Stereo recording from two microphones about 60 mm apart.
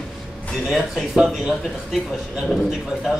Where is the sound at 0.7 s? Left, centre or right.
Centre.